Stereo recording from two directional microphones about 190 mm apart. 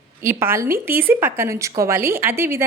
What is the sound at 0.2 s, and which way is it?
A woman's voice, 15° right (ahead or behind).